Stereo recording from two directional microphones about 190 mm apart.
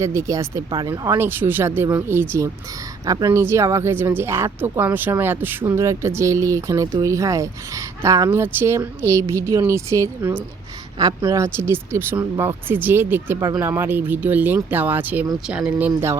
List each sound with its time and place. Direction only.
0.0 s speech: 15° right (ahead or behind)